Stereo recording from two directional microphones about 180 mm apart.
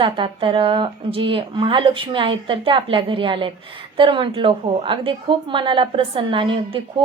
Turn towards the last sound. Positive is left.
turn(degrees=-30)  # may be behind; listen again after turning